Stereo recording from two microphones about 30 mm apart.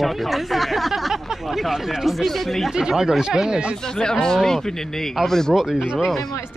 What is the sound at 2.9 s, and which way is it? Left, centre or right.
Speech, centre.